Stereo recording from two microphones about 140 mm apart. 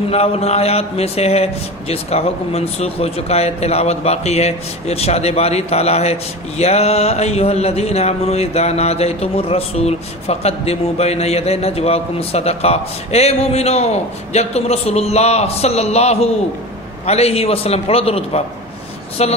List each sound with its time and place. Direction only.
0.1 s speech: 45° left (ahead or behind)